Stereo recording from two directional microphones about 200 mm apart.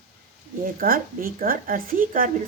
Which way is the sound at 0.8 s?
45° right (ahead or behind).